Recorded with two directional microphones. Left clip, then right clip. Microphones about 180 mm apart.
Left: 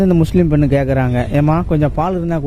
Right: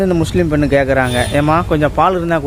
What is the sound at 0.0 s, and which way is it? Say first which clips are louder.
Speech: even; 45° left (ahead or behind).